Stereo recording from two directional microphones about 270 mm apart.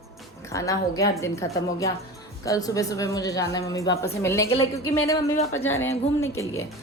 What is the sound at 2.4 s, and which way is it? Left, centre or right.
A woman's voice, centre.